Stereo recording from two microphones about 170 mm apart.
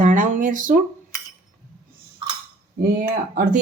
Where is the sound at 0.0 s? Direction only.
50° right (ahead or behind).